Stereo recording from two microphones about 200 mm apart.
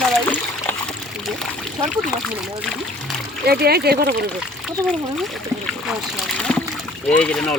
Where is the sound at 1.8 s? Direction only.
Centre (ahead or behind).